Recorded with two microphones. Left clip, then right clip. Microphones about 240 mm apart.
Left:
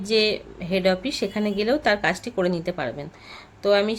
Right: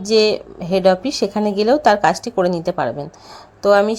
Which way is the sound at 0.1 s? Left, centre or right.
Centre.